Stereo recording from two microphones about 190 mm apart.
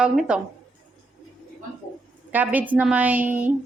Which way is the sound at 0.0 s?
5° right (ahead or behind).